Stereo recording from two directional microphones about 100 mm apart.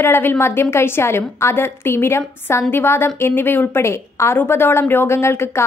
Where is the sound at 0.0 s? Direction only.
20° left (ahead or behind).